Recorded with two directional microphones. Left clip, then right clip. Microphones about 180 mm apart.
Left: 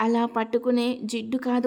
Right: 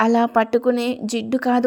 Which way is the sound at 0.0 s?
20° right (ahead or behind).